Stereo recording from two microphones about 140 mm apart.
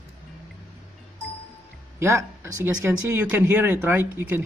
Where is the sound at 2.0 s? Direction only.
15° right (ahead or behind).